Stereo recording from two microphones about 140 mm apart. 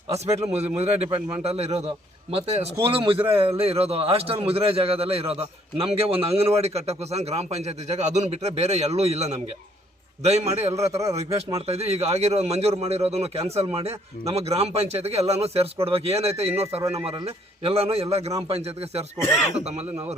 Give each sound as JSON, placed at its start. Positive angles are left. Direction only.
{"t": 0.5, "sound": "a man's voice", "side_deg": -50}
{"t": 2.8, "sound": "a man's voice", "side_deg": -40}